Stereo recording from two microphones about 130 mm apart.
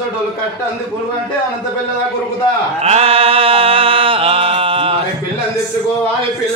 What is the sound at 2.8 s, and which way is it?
Mantra, 50° right (ahead or behind).